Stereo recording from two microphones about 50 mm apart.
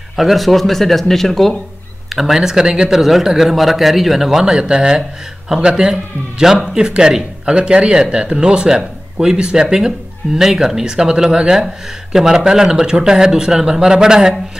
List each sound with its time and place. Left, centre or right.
0.1 s speech: centre
2.1 s speech: centre
2.9 s speech: centre